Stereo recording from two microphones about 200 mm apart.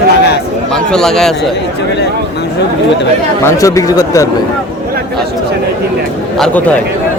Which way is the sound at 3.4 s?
15° left (ahead or behind).